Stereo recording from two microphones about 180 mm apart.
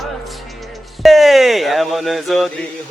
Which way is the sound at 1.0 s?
Centre (ahead or behind).